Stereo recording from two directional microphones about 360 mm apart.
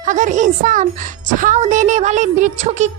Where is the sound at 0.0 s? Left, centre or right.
Centre.